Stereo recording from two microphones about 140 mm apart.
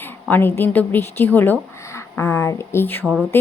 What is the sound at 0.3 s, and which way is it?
A woman's voice, 15° left (ahead or behind).